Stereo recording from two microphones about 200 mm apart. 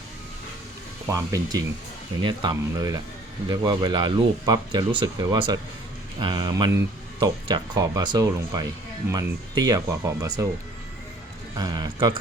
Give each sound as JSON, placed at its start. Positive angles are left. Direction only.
{"t": 1.0, "sound": "speech", "side_deg": -15}
{"t": 11.5, "sound": "speech", "side_deg": -20}